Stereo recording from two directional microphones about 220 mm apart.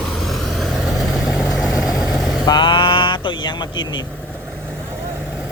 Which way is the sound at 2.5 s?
20° left (ahead or behind).